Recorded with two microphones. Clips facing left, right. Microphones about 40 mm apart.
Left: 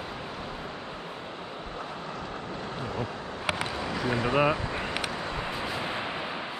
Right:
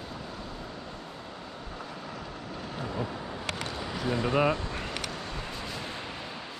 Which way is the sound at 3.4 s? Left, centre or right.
Centre.